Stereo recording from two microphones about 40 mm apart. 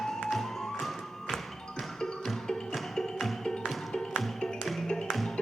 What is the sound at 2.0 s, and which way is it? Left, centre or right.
Music, centre.